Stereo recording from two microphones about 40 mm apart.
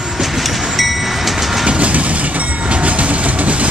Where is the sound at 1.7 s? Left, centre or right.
Right.